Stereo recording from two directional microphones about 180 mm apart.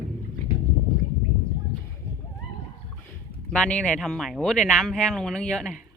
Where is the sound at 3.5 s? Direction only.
5° left (ahead or behind).